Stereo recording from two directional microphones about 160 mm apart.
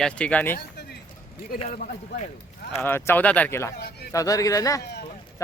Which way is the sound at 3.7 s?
80° left.